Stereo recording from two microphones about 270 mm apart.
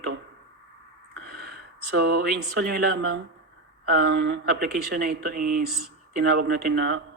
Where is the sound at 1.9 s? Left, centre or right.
Right.